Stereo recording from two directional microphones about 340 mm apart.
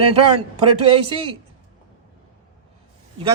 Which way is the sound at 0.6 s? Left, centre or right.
Centre.